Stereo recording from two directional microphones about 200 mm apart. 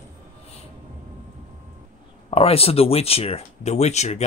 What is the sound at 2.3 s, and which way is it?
Speech, 30° left (ahead or behind).